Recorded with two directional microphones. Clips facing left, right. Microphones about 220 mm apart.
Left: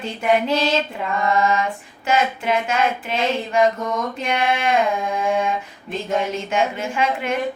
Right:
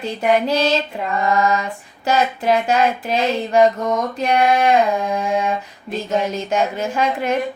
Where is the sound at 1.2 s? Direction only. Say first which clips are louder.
Right 1 dB; 40° right (ahead or behind).